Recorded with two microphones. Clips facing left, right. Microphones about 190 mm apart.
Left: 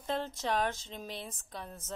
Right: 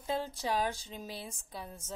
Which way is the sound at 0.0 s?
10° right (ahead or behind).